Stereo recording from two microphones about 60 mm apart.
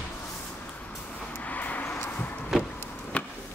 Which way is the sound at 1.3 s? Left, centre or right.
Left.